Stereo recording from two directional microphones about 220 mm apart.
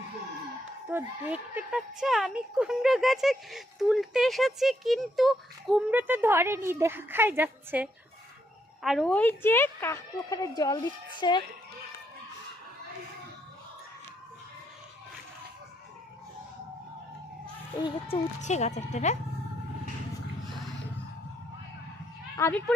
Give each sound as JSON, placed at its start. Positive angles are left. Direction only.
{"t": 0.9, "sound": "a woman's voice", "side_deg": -10}
{"t": 17.8, "sound": "speech", "side_deg": 30}
{"t": 22.4, "sound": "speech", "side_deg": 10}